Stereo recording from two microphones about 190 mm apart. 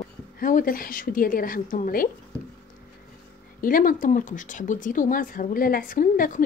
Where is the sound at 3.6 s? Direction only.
45° left (ahead or behind).